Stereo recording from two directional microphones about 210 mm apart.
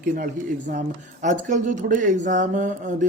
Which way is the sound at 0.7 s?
35° right (ahead or behind).